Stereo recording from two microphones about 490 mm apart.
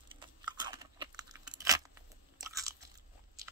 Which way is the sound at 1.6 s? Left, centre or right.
Centre.